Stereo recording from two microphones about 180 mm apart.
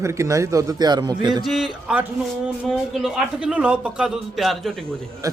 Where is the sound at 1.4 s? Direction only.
Centre (ahead or behind).